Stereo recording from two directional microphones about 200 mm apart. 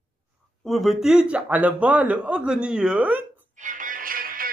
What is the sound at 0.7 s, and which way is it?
A man's voice, centre (ahead or behind).